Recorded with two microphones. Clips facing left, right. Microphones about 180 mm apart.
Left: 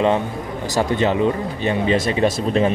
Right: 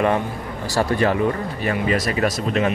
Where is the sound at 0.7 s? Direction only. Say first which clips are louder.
Left 1 dB; 20° left (ahead or behind).